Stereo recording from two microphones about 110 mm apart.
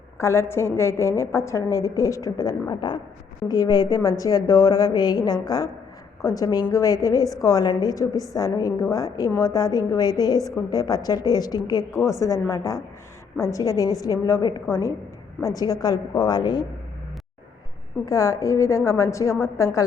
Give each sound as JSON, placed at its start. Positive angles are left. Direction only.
{"t": 0.2, "sound": "a woman's voice", "side_deg": 25}
{"t": 18.0, "sound": "a woman's voice", "side_deg": 30}